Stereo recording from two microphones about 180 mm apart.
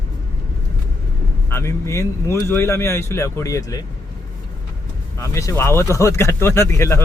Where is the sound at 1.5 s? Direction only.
15° left (ahead or behind).